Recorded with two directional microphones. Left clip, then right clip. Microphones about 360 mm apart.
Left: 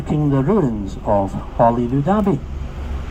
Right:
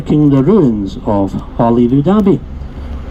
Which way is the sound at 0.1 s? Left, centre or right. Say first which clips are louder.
Right 8 dB; right.